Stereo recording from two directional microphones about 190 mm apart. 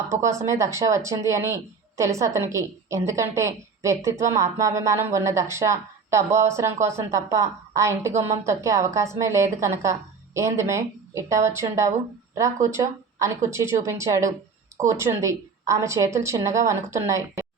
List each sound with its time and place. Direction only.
0.1 s speech: 15° right (ahead or behind)